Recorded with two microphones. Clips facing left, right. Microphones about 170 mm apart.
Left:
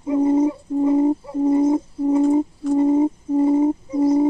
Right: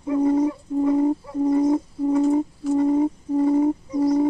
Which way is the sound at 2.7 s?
20° left (ahead or behind).